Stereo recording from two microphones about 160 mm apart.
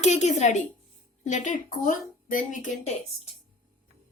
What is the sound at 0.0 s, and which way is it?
A woman's voice, 45° left (ahead or behind).